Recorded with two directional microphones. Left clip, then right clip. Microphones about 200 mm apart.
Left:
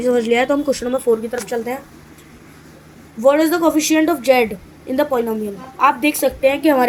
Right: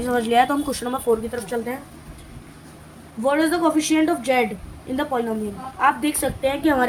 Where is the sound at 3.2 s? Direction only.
10° left (ahead or behind).